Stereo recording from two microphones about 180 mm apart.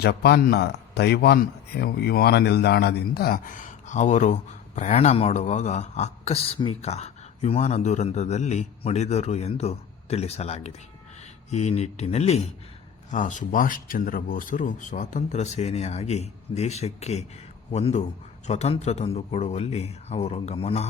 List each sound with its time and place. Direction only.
0.0 s a man's voice: 65° left (ahead or behind); by 20.8 s 35° left (ahead or behind)